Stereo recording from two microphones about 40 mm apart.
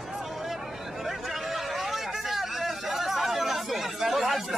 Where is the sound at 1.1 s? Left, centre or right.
Centre.